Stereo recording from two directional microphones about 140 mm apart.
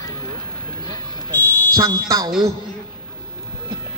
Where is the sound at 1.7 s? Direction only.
25° right (ahead or behind).